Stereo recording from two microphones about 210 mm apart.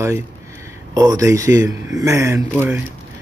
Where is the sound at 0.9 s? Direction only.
15° right (ahead or behind).